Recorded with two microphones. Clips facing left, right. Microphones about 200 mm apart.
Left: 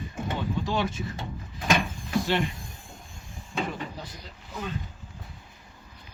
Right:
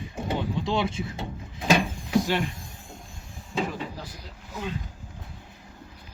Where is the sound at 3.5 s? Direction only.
5° right (ahead or behind).